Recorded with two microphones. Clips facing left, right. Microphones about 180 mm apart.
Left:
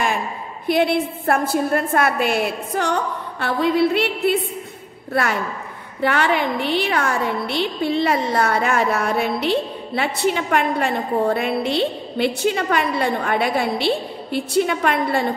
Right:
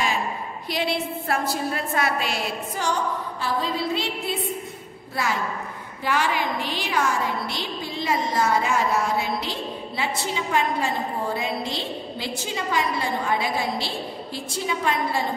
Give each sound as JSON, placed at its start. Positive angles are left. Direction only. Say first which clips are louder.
{"t": 0.7, "sound": "a woman's voice", "louder": "left 8 dB", "side_deg": 55}